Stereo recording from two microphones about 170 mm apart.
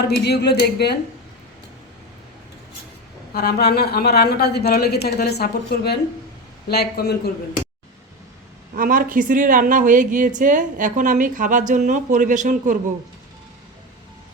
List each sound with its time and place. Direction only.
0.3 s a woman's voice: 75° left (ahead or behind)
3.3 s a woman's voice: 70° left (ahead or behind)
8.7 s speech: 55° right (ahead or behind)